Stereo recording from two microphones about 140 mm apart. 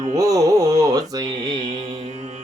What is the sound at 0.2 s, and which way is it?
Carnatic music, 25° right (ahead or behind).